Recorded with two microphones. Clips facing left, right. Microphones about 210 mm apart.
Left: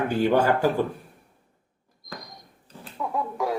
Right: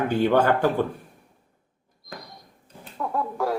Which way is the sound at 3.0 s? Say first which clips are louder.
Right 1 dB; centre (ahead or behind).